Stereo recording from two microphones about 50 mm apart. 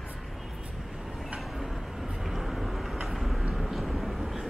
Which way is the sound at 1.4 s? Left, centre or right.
Centre.